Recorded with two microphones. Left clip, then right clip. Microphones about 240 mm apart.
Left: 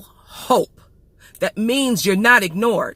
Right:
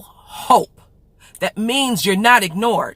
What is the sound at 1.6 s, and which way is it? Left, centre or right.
A woman's voice, right.